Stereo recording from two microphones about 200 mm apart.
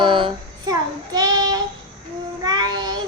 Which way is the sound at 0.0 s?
25° right (ahead or behind).